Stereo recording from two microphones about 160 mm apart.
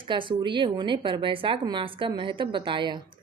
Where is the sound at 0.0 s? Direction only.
30° right (ahead or behind).